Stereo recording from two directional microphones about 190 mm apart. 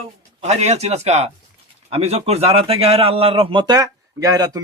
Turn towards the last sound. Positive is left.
turn(degrees=-20)  # may be behind; listen again after turning